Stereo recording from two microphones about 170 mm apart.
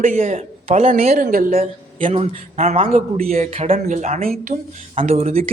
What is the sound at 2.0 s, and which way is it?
A man's voice, 40° right (ahead or behind).